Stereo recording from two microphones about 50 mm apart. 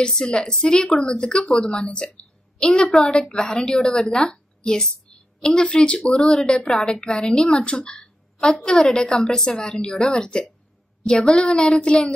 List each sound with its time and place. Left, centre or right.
0.0 s a woman's voice: centre
2.9 s a woman's voice: centre